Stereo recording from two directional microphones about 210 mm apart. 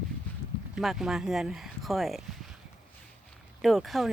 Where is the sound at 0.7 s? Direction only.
Centre (ahead or behind).